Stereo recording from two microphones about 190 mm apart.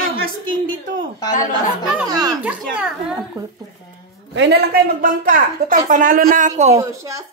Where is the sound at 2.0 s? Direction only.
20° right (ahead or behind).